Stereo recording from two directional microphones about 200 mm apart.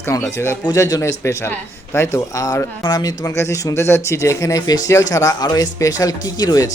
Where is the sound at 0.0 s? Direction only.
10° left (ahead or behind).